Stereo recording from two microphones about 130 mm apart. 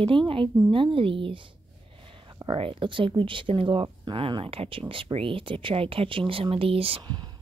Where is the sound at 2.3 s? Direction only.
40° right (ahead or behind).